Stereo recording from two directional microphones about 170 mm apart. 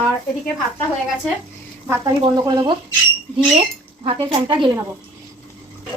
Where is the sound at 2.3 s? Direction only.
20° right (ahead or behind).